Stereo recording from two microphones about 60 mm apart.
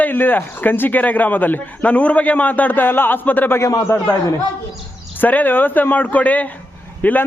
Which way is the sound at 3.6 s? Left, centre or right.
Left.